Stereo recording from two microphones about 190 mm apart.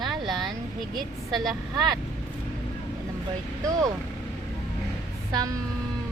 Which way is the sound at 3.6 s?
20° right (ahead or behind).